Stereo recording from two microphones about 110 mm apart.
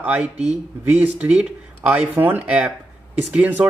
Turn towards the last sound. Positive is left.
turn(degrees=-15)  # may be behind; listen again after turning